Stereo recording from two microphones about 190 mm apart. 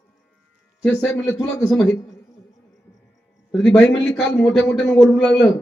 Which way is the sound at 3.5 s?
5° left (ahead or behind).